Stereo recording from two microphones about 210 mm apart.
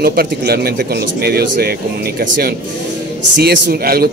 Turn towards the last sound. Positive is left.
turn(degrees=-45)  # may be behind; listen again after turning